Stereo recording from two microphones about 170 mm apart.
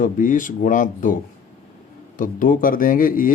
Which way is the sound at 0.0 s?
50° left (ahead or behind).